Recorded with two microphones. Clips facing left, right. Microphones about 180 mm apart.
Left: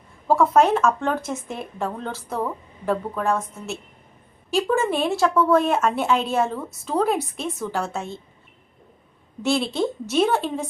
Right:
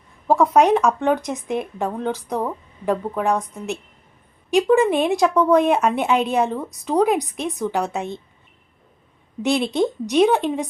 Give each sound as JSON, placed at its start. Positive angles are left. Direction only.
{"t": 0.3, "sound": "speech", "side_deg": -15}
{"t": 9.4, "sound": "speech", "side_deg": -20}